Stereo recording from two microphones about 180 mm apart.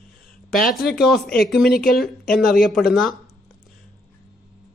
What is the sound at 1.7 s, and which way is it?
Speech, 55° left (ahead or behind).